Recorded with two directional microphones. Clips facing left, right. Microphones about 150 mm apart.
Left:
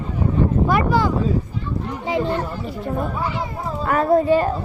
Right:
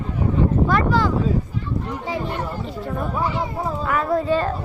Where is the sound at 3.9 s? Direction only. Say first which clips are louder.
Left 6 dB; 35° left (ahead or behind).